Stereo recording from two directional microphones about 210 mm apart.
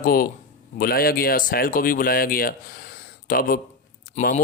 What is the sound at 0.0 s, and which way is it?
A man's voice, 45° left (ahead or behind).